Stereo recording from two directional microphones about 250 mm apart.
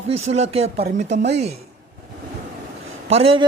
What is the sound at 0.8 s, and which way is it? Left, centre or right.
Speech, right.